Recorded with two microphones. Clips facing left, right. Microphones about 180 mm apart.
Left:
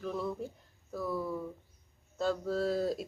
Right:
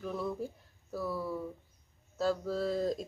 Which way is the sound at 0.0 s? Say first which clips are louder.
Even; centre (ahead or behind).